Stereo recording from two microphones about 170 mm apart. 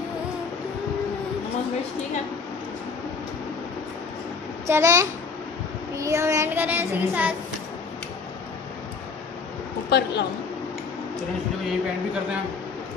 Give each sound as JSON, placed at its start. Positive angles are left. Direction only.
{"t": 4.6, "sound": "a child's voice", "side_deg": -15}
{"t": 9.8, "sound": "a woman's voice", "side_deg": 85}